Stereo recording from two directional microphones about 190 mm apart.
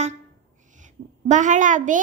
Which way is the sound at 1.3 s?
40° right (ahead or behind).